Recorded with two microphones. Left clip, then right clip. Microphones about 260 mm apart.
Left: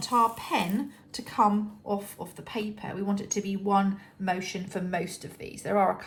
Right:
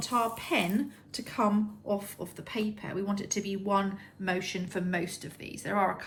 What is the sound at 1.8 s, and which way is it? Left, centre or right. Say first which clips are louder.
Speech: left 1 dB; left.